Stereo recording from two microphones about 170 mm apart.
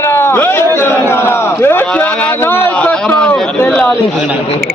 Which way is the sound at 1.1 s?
15° left (ahead or behind).